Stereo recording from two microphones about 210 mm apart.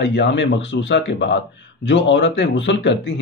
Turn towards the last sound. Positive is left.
turn(degrees=55)  # may be behind; listen again after turning